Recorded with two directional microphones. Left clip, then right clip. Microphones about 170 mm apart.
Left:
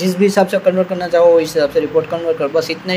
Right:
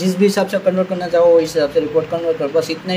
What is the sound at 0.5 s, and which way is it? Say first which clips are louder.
Speech: left 2 dB; 40° left (ahead or behind).